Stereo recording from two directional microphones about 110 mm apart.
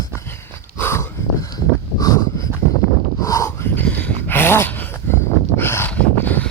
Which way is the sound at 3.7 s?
15° left (ahead or behind).